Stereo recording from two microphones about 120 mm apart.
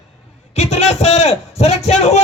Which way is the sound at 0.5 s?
65° left (ahead or behind).